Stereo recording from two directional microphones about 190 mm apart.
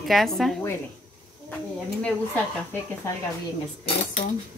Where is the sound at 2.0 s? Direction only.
10° left (ahead or behind).